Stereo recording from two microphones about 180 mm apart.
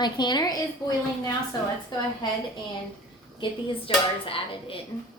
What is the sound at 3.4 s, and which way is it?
Speech, 30° left (ahead or behind).